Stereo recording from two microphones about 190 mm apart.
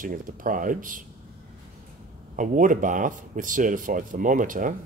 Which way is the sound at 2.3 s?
45° right (ahead or behind).